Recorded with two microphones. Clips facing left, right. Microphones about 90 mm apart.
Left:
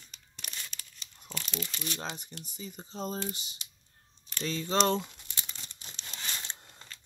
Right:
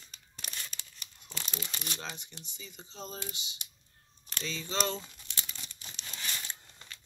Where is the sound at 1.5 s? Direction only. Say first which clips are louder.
Left 4 dB; 40° right (ahead or behind).